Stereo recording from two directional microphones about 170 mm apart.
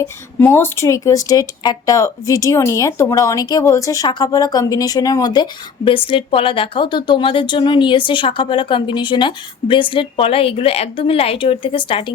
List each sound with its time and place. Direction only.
0.0 s speech: 15° left (ahead or behind); by 12.1 s 30° left (ahead or behind)